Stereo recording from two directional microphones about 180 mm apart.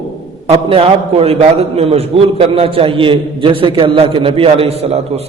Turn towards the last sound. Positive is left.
turn(degrees=-35)  # may be behind; listen again after turning